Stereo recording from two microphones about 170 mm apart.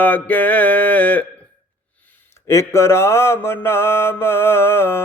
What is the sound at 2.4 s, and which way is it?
Mantra, 15° left (ahead or behind).